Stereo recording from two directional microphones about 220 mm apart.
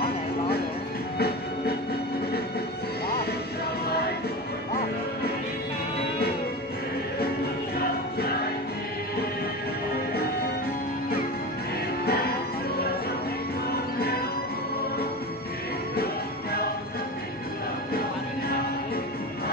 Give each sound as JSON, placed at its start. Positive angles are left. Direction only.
{"t": 12.1, "sound": "music", "side_deg": 45}
{"t": 13.9, "sound": "music", "side_deg": 45}